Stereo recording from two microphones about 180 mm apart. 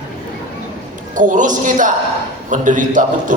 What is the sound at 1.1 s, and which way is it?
A man's voice, 45° right (ahead or behind).